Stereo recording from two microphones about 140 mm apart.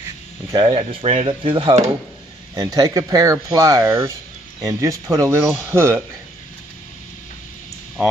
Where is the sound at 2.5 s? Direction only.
30° right (ahead or behind).